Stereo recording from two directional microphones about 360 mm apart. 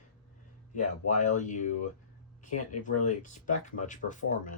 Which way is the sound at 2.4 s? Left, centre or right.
Left.